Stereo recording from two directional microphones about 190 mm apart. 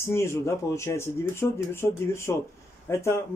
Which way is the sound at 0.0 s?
15° left (ahead or behind).